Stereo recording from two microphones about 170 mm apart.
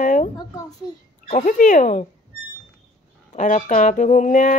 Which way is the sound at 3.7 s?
45° left (ahead or behind).